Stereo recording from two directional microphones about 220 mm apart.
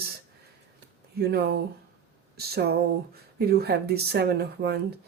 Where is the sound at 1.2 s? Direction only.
45° right (ahead or behind).